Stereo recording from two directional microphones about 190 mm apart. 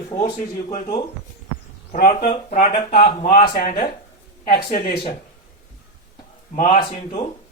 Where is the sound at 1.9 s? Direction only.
45° left (ahead or behind).